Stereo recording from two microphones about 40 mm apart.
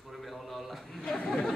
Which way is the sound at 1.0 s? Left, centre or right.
Centre.